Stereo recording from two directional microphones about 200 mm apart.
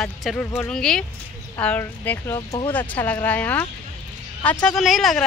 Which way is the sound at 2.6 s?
10° left (ahead or behind).